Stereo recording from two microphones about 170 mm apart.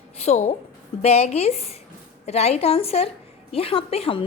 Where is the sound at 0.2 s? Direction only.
40° left (ahead or behind).